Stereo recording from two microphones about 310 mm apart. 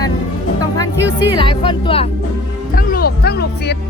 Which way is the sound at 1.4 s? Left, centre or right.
Centre.